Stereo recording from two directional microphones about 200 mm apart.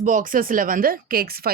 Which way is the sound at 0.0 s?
40° right (ahead or behind).